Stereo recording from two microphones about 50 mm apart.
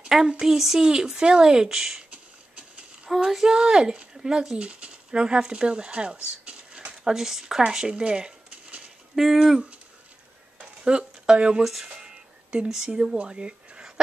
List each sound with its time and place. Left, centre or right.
0.3 s speech: centre
3.2 s speech: centre
4.6 s speech: right
6.4 s a sound: right
7.1 s speech: centre
9.1 s speech: centre
10.6 s a sound: centre
13.2 s speech: centre